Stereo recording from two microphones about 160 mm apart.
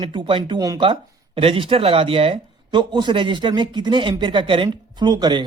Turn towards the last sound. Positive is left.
turn(degrees=-25)  # may be behind; listen again after turning